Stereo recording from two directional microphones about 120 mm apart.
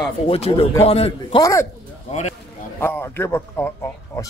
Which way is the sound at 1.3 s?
25° left (ahead or behind).